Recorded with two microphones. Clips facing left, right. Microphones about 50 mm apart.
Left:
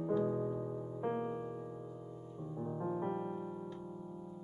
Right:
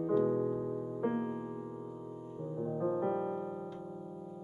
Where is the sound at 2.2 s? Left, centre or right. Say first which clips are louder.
Right 5 dB; right.